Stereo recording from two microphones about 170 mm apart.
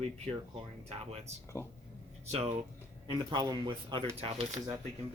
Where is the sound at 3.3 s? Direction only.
25° right (ahead or behind).